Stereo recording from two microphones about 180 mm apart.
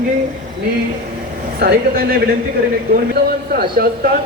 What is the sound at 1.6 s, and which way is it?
Speech, 60° right (ahead or behind).